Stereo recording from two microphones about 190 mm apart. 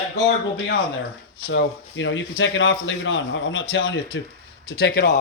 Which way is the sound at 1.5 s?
80° left.